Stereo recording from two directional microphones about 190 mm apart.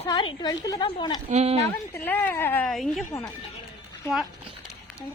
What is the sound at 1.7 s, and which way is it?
A woman's voice, 10° left (ahead or behind).